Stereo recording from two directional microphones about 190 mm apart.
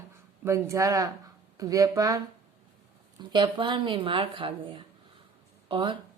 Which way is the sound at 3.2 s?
25° right (ahead or behind).